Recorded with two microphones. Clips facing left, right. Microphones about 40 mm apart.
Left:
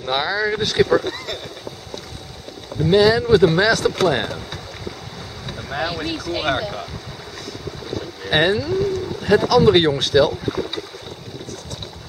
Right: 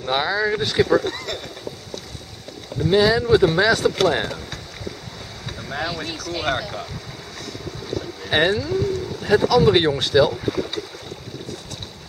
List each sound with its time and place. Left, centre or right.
0.0 s speech: centre
2.8 s speech: centre
5.5 s vehicle: centre
6.0 s speech: left
6.4 s speech: centre
8.0 s boat: centre
8.5 s speech: centre